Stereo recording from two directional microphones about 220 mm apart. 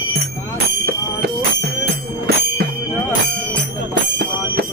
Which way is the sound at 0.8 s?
45° right (ahead or behind).